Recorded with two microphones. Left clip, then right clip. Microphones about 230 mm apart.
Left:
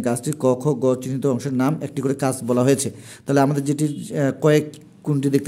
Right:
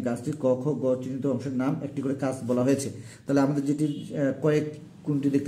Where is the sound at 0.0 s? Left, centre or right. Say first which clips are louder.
Left 6 dB; left.